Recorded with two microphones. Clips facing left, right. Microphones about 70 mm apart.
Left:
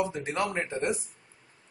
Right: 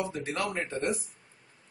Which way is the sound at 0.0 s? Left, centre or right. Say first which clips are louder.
Left 3 dB; centre.